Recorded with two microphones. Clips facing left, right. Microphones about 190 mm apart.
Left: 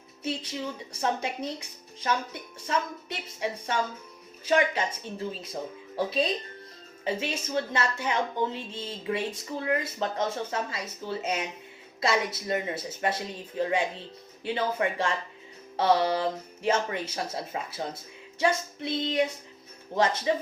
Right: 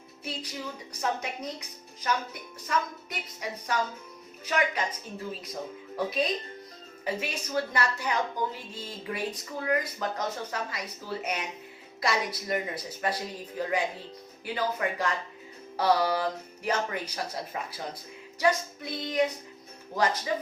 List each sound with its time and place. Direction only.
1.0 s a woman's voice: 30° left (ahead or behind)
20.3 s a woman's voice: 25° left (ahead or behind)